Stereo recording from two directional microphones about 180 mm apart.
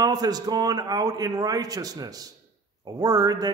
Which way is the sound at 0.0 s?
20° right (ahead or behind).